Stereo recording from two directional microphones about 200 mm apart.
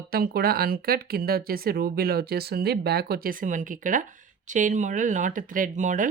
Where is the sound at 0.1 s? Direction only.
50° right (ahead or behind).